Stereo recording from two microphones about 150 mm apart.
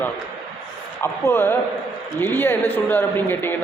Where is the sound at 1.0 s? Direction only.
15° left (ahead or behind).